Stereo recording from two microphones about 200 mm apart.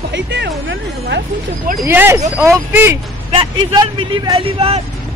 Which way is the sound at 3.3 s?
25° right (ahead or behind).